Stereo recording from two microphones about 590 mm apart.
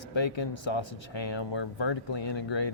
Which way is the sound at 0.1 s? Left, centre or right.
Left.